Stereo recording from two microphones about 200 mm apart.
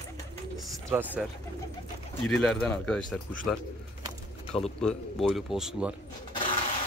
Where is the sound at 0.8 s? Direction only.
10° right (ahead or behind).